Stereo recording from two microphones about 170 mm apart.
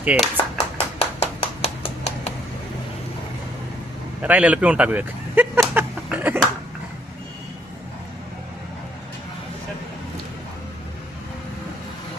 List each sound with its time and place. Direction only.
0.0 s speech: 10° right (ahead or behind)
0.9 s hands: 35° left (ahead or behind)
4.2 s a sound: 10° right (ahead or behind)